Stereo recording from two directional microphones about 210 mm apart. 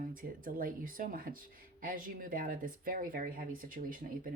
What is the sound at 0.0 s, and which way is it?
Speech, 40° right (ahead or behind).